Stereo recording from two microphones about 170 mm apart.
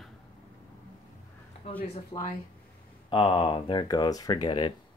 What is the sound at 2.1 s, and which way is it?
Speech, 30° left (ahead or behind).